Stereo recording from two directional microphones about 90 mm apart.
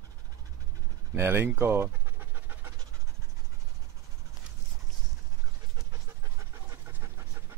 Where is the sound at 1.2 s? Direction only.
25° right (ahead or behind).